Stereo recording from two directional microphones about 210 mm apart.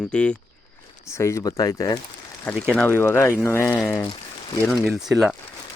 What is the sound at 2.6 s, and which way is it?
Speech, centre (ahead or behind).